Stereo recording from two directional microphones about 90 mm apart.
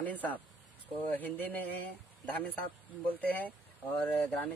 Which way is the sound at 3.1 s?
20° left (ahead or behind).